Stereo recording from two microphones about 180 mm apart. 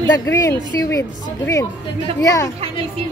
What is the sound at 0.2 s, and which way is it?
A woman's voice, 15° left (ahead or behind).